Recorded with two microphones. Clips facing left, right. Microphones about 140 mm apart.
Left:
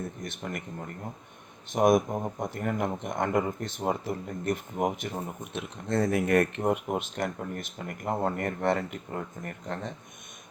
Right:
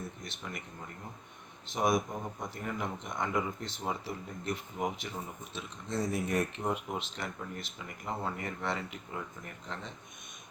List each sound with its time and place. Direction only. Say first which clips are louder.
0.2 s speech: left 7 dB; 50° left (ahead or behind)